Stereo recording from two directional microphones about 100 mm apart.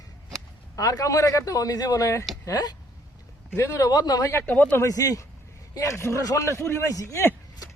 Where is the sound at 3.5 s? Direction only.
30° left (ahead or behind).